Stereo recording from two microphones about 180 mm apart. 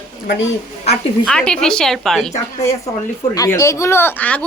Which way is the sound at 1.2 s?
5° left (ahead or behind).